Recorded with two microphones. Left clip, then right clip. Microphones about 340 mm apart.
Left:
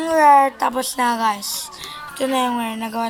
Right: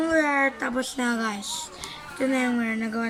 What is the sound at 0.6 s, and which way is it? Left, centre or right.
A child's voice, centre.